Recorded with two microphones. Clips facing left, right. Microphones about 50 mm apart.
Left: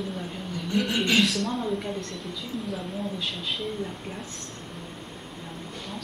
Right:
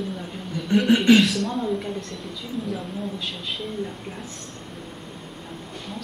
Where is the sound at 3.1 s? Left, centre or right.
Centre.